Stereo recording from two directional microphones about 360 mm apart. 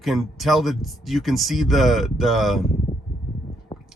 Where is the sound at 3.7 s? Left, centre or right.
Centre.